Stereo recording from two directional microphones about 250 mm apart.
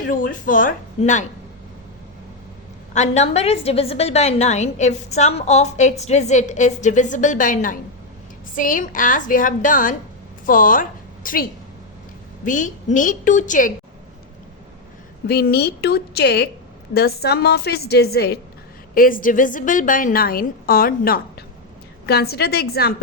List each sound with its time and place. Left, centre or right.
0.0 s a woman's voice: left
2.9 s a woman's voice: left
12.5 s a woman's voice: left
15.3 s a woman's voice: left